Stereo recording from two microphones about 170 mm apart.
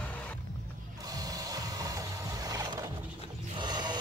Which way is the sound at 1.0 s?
20° right (ahead or behind).